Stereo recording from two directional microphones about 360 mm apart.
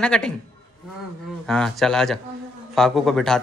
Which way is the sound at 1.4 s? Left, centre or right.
Centre.